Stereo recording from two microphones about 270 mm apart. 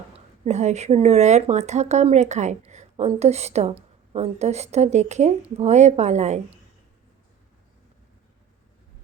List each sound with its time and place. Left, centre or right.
0.4 s speech: right